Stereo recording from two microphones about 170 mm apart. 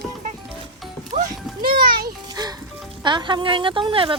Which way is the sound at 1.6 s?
60° right (ahead or behind).